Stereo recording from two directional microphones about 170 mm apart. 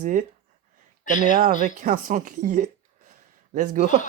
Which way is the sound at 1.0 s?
50° left (ahead or behind).